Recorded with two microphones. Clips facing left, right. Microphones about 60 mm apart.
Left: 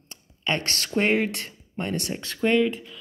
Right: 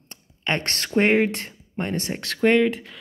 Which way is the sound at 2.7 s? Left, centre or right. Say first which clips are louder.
Right 3 dB; right.